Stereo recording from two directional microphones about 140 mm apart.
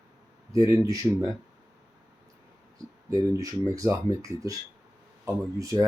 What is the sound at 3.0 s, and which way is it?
Speech, 25° right (ahead or behind).